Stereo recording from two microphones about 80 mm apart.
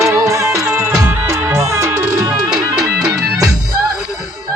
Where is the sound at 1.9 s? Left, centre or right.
Right.